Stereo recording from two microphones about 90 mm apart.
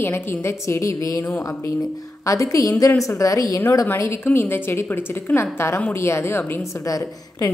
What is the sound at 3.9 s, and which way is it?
A woman's voice, 25° left (ahead or behind).